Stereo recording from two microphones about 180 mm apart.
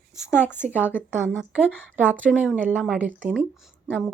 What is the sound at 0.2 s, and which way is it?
Speech, 10° left (ahead or behind).